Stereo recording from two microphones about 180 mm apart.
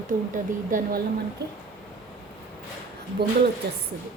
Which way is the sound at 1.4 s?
65° right (ahead or behind).